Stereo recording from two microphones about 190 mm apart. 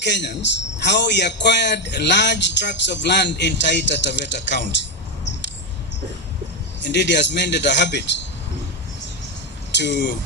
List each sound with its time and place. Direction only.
0.0 s a man's voice: 65° left (ahead or behind)
6.8 s a man's voice: 65° left (ahead or behind)
9.7 s a man's voice: 65° left (ahead or behind)